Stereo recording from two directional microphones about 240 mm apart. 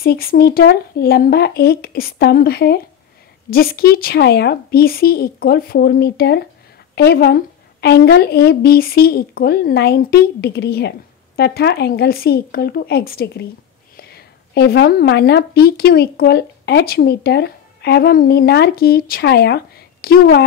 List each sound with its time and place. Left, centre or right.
0.0 s a woman's voice: left